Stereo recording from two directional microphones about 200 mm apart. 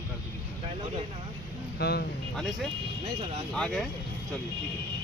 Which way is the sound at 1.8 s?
55° left (ahead or behind).